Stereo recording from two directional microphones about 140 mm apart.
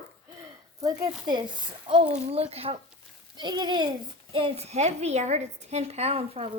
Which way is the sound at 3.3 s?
30° right (ahead or behind).